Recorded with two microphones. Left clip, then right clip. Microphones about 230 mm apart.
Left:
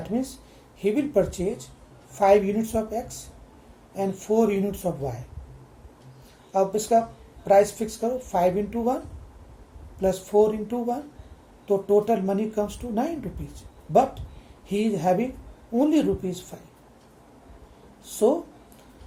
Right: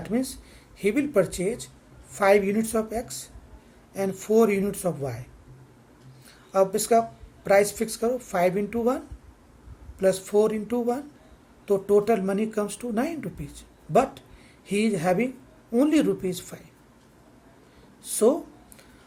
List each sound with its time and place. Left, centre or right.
0.0 s speech: right
6.5 s speech: right
10.0 s speech: right
18.1 s speech: right